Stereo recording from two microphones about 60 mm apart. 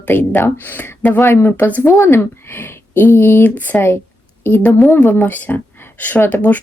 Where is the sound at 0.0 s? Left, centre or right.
Left.